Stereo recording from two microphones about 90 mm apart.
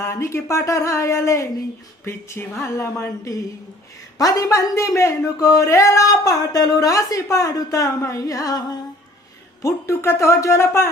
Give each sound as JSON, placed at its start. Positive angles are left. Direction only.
{"t": 0.0, "sound": "speech", "side_deg": 30}
{"t": 9.6, "sound": "speech", "side_deg": 35}